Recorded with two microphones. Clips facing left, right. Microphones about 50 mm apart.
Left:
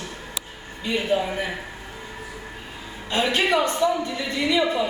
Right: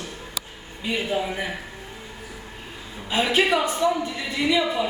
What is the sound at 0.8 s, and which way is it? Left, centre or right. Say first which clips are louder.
Speech: left 2 dB; centre.